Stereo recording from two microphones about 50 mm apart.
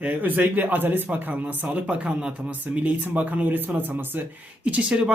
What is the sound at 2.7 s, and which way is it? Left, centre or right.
A man's voice, right.